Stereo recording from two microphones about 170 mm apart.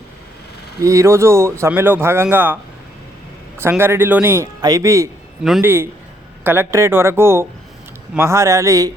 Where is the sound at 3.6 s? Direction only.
15° right (ahead or behind).